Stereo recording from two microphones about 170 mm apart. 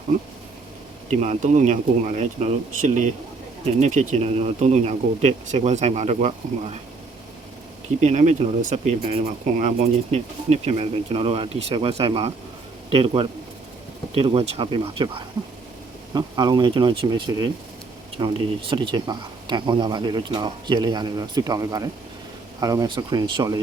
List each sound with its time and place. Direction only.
1.2 s speech: 40° right (ahead or behind)
8.0 s speech: 40° right (ahead or behind)
9.0 s speech: 35° right (ahead or behind)